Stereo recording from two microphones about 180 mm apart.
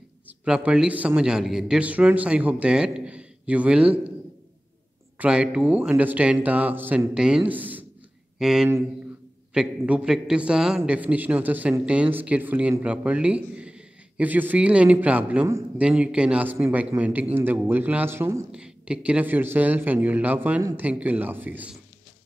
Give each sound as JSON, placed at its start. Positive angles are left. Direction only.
{"t": 0.5, "sound": "a man's voice", "side_deg": -5}
{"t": 5.2, "sound": "a man's voice", "side_deg": -5}